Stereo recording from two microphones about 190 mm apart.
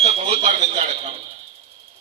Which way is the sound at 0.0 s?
35° right (ahead or behind).